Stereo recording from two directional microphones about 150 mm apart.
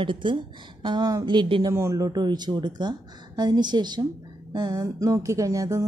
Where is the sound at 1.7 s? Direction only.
20° right (ahead or behind).